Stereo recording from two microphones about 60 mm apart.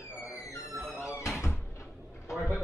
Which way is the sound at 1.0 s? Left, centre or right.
Left.